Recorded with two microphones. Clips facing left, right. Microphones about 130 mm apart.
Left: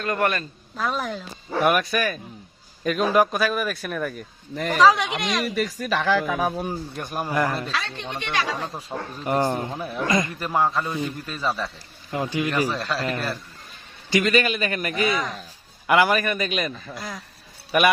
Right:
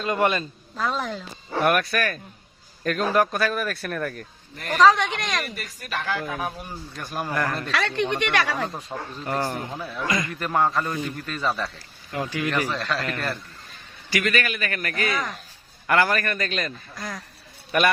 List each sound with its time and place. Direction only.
0.0 s a man's voice: 20° right (ahead or behind)
0.8 s a man's voice: centre (ahead or behind)
5.5 s speech: 90° left
6.9 s a man's voice: 20° left (ahead or behind)
7.7 s speech: 65° right (ahead or behind)
8.6 s speech: 5° left (ahead or behind)
9.2 s a man's voice: 20° left (ahead or behind)
10.4 s a man's voice: 5° left (ahead or behind)
12.1 s a man's voice: 20° left (ahead or behind); by 13.4 s centre (ahead or behind)
14.1 s a man's voice: 20° left (ahead or behind)